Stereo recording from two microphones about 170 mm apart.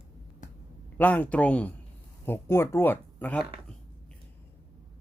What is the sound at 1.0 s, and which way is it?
Speech, 10° left (ahead or behind).